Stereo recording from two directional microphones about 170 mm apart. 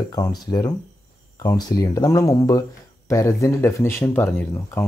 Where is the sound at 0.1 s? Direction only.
25° left (ahead or behind).